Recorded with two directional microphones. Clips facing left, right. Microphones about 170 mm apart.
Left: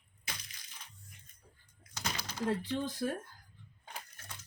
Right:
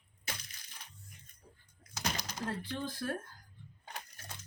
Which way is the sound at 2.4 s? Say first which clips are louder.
Left 5 dB; 15° left (ahead or behind).